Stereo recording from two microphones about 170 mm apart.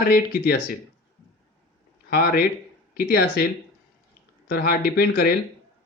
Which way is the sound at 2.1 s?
65° left (ahead or behind).